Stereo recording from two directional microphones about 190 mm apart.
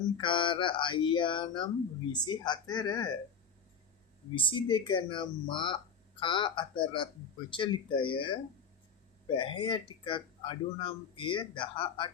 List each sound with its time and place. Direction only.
0.2 s speech: 25° left (ahead or behind)
4.4 s speech: 25° left (ahead or behind)